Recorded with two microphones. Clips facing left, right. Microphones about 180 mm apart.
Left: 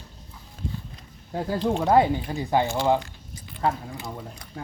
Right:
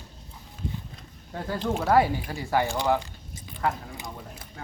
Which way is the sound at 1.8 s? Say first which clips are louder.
Left 1 dB; 20° left (ahead or behind).